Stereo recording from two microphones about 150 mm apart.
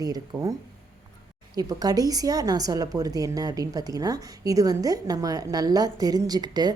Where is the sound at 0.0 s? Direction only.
25° right (ahead or behind).